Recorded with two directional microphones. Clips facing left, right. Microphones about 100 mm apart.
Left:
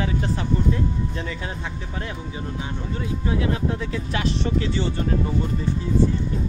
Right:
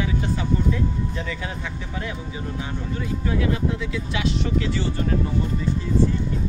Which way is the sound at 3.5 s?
40° left (ahead or behind).